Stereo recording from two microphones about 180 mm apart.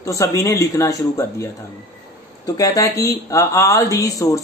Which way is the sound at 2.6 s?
20° left (ahead or behind).